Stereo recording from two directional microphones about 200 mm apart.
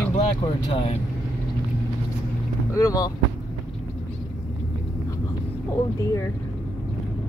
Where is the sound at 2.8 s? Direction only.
15° left (ahead or behind).